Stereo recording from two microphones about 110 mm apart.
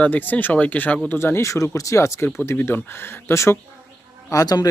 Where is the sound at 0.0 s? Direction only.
15° left (ahead or behind).